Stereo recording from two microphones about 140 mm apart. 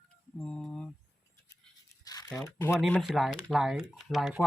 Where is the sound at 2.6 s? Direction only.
15° left (ahead or behind).